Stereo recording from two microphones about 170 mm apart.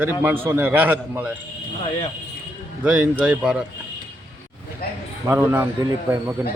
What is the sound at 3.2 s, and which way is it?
Speech, 5° right (ahead or behind).